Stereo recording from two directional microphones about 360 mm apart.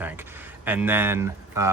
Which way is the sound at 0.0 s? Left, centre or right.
Centre.